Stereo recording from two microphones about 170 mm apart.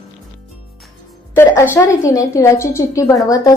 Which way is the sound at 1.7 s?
15° left (ahead or behind).